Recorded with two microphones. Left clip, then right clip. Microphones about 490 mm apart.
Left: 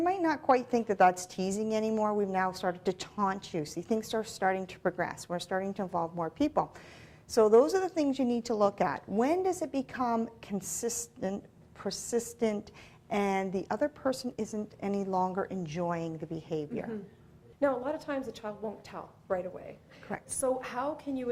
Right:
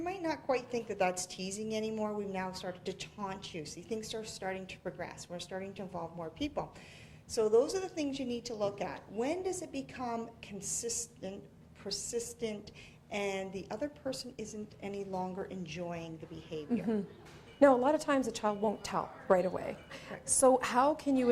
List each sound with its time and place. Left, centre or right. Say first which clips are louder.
0.0 s a woman's voice: left 8 dB; left
17.6 s a woman's voice: right 5 dB; right